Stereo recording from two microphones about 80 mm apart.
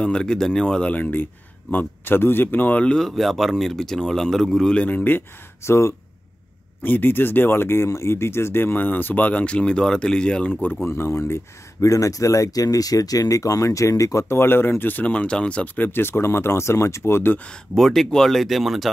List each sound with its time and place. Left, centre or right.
0.0 s speech: centre; by 5.9 s left
6.8 s speech: left
17.5 s speech: centre